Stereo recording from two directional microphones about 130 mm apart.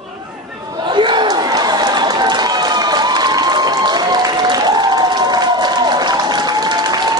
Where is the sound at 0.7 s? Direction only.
35° right (ahead or behind).